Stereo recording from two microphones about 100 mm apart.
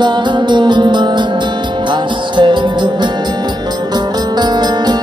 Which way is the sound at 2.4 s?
50° right (ahead or behind).